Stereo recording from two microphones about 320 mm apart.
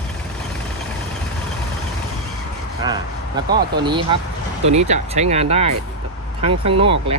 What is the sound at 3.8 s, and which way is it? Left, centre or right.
Speech, centre.